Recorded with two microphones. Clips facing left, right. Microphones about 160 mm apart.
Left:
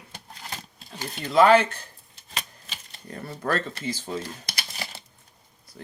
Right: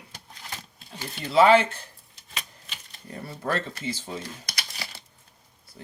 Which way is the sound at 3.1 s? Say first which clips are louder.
Left 2 dB; 25° right (ahead or behind).